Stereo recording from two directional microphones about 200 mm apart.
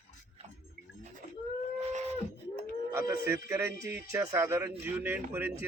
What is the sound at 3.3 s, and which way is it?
Speech, 15° right (ahead or behind).